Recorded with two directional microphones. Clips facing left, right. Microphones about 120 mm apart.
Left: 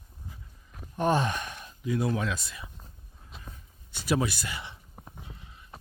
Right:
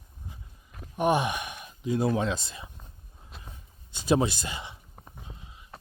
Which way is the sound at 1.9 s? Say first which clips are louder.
Right 3 dB; 25° right (ahead or behind).